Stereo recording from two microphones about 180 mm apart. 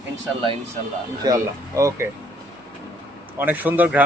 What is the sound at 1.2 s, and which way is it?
Speech, 20° right (ahead or behind).